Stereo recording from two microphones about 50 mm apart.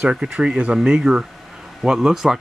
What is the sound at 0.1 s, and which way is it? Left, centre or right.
Speech, right.